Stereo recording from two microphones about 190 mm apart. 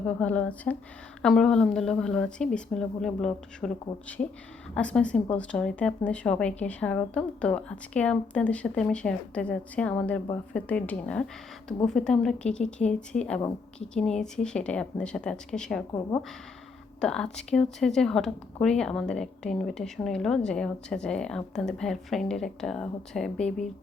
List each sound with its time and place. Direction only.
0.2 s speech: 5° left (ahead or behind)
4.7 s speech: 5° left (ahead or behind)
15.9 s speech: 20° left (ahead or behind)
17.0 s speech: 5° left (ahead or behind)